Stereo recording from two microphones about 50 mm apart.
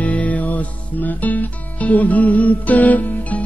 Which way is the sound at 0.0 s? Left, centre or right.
Left.